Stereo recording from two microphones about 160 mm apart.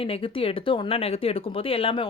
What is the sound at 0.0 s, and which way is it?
Speech, 35° left (ahead or behind).